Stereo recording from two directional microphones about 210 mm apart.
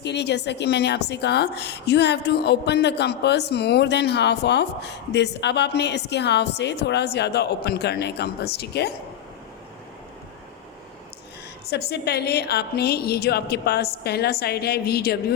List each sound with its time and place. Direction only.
0.0 s a woman's voice: 55° left (ahead or behind)
11.7 s a woman's voice: 50° left (ahead or behind)